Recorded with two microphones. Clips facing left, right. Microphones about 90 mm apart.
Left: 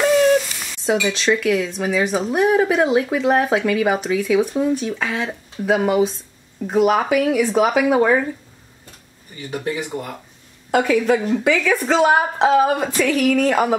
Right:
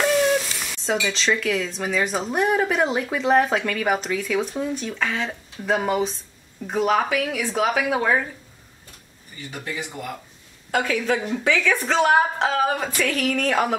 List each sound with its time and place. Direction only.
0.0 s sizzle: centre (ahead or behind)
1.0 s a woman's voice: 5° left (ahead or behind)
10.7 s a woman's voice: 15° left (ahead or behind)
11.3 s a woman's voice: 5° left (ahead or behind)